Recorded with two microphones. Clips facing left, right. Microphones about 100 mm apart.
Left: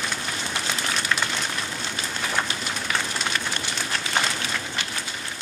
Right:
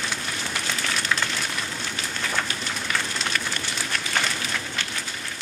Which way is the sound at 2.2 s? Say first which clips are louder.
Left 1 dB; 20° left (ahead or behind).